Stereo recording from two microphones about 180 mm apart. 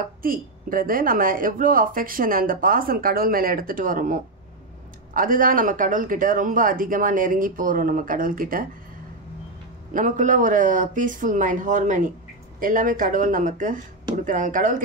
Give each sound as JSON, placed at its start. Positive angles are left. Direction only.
{"t": 0.2, "sound": "a woman's voice", "side_deg": -50}
{"t": 9.9, "sound": "a woman's voice", "side_deg": -45}